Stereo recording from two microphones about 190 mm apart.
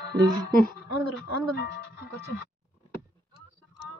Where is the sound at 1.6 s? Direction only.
60° left (ahead or behind).